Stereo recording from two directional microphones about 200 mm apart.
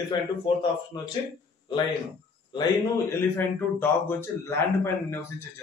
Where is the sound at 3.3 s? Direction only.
10° left (ahead or behind).